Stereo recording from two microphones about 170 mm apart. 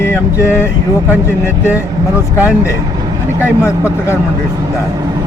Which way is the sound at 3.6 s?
15° left (ahead or behind).